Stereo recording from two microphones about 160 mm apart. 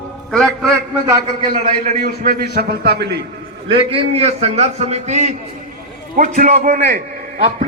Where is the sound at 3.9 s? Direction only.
40° right (ahead or behind); by 7.0 s 60° right (ahead or behind).